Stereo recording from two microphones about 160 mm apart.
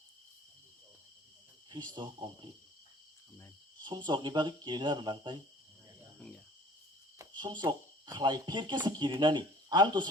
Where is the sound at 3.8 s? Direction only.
30° right (ahead or behind).